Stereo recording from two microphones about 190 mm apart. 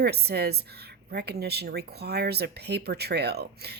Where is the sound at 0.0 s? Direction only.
60° right (ahead or behind).